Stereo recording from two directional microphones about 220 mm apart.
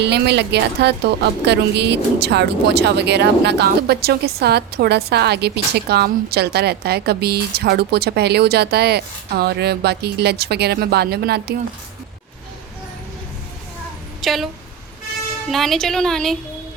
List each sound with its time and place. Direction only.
0.0 s a woman's voice: 50° right (ahead or behind)
14.2 s a woman's voice: centre (ahead or behind)